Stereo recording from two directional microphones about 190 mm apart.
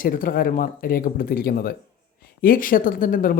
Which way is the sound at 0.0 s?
45° left (ahead or behind).